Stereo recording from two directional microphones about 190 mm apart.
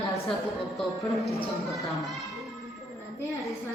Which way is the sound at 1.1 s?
Centre (ahead or behind).